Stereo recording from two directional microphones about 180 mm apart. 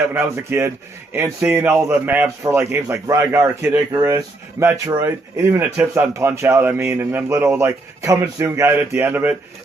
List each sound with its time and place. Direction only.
0.1 s speech: 15° right (ahead or behind)